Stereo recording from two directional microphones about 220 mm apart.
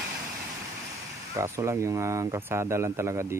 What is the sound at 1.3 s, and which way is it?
Speech, 10° right (ahead or behind).